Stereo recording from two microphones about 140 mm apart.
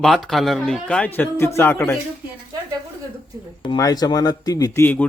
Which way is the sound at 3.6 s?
25° left (ahead or behind).